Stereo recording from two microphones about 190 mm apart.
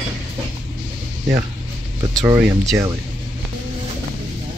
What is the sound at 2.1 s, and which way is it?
Speech, 15° right (ahead or behind).